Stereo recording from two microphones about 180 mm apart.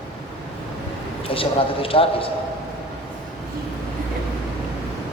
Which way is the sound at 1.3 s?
30° left (ahead or behind).